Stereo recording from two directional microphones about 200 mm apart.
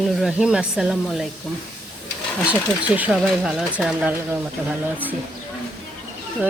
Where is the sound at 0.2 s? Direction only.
5° right (ahead or behind).